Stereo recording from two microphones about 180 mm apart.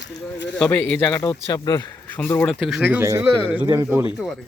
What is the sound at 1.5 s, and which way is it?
Speech, 20° left (ahead or behind).